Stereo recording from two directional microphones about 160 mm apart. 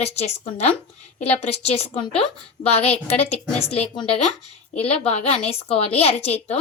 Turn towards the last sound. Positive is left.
turn(degrees=40)  # may be behind; listen again after turning